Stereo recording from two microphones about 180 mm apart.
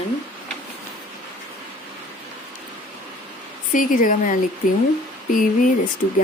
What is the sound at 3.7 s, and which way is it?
Speech, 45° left (ahead or behind).